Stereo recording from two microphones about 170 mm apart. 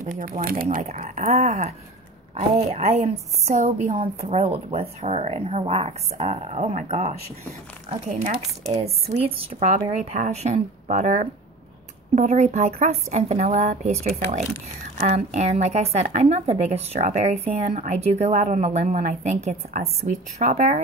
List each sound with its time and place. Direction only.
0.0 s speech: 45° right (ahead or behind)
9.4 s speech: 40° right (ahead or behind)